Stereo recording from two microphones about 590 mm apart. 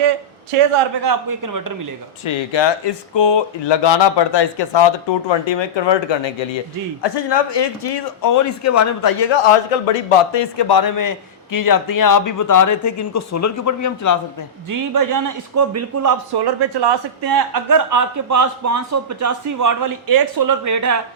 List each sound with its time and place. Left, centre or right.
0.5 s a man's voice: right
1.0 s speech: right
2.2 s speech: left
9.3 s a man's voice: left
10.6 s speech: left
14.7 s speech: right
16.3 s speech: right